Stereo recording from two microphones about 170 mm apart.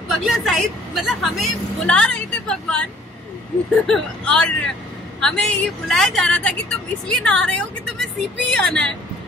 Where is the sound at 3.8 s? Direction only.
5° left (ahead or behind).